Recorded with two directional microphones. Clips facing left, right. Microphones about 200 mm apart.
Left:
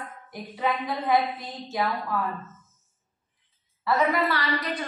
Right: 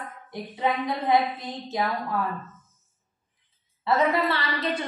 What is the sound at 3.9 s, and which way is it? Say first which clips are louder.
Speech: right 1 dB; 25° right (ahead or behind).